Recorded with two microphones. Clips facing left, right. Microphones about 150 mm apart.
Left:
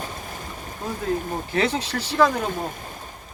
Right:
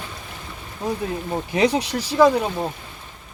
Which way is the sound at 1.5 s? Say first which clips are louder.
Right 4 dB; 15° right (ahead or behind).